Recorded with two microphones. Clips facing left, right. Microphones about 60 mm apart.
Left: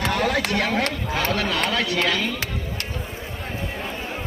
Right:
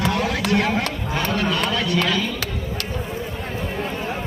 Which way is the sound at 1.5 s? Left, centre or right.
Left.